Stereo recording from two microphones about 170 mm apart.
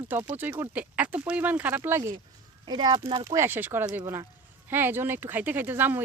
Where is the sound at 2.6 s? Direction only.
25° right (ahead or behind).